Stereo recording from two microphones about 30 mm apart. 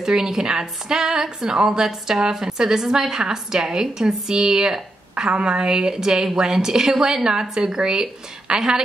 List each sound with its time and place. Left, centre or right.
0.0 s a woman's voice: centre